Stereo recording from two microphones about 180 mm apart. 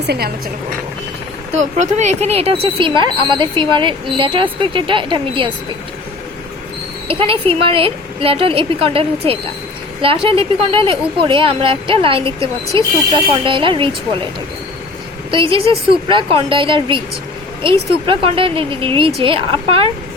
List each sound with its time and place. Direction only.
0.1 s a woman's voice: 60° right (ahead or behind)
1.5 s speech: 40° right (ahead or behind)
7.1 s a woman's voice: 30° right (ahead or behind)
15.3 s speech: 30° right (ahead or behind)